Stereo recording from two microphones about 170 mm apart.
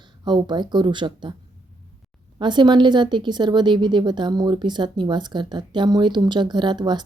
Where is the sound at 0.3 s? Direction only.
25° right (ahead or behind).